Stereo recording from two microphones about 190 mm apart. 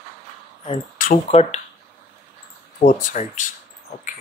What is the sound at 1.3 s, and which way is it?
Speech, 30° left (ahead or behind).